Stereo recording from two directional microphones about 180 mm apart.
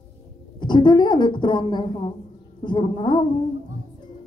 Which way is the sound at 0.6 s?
25° left (ahead or behind).